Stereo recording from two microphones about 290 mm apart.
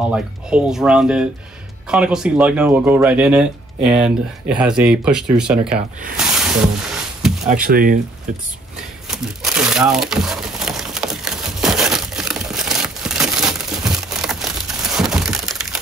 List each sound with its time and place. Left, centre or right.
0.1 s speech: centre
6.1 s snake: centre
7.5 s speech: right
8.7 s crumpling: centre